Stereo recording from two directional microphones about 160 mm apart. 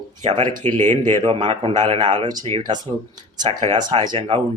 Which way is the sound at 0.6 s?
40° right (ahead or behind).